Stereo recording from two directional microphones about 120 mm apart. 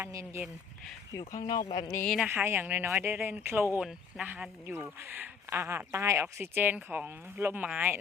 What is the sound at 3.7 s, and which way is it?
Speech, 5° right (ahead or behind).